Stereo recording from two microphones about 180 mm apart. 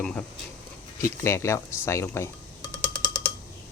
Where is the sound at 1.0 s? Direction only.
15° left (ahead or behind).